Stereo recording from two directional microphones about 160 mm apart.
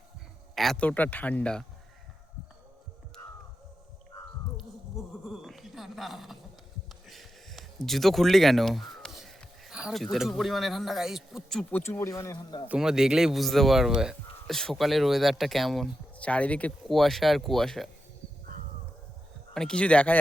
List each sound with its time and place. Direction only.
0.5 s speech: centre (ahead or behind)
4.5 s a sound: centre (ahead or behind)
7.1 s speech: centre (ahead or behind)
11.8 s speech: 15° left (ahead or behind)
12.6 s speech: 5° right (ahead or behind)
19.5 s speech: 5° left (ahead or behind)